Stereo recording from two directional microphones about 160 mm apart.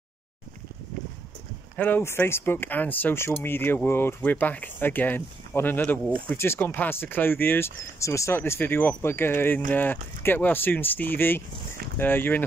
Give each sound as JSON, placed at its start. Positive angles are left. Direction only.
{"t": 1.8, "sound": "speech", "side_deg": 10}